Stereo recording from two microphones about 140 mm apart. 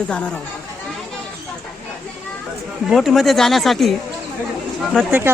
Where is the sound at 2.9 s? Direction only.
Centre (ahead or behind).